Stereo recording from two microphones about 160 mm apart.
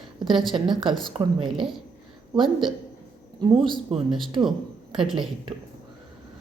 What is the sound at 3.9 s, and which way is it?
Speech, 40° right (ahead or behind).